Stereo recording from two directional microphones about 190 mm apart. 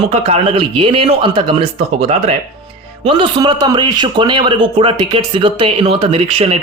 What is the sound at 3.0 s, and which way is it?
A man's voice, 25° right (ahead or behind).